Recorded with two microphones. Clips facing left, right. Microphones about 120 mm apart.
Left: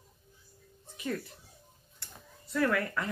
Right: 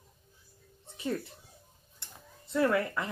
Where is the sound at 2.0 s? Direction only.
25° right (ahead or behind).